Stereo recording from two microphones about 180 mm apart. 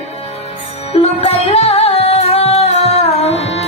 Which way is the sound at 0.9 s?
35° left (ahead or behind).